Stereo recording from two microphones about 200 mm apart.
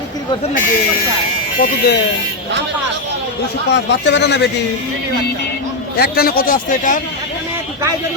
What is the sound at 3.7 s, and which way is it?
Speech, 60° left (ahead or behind).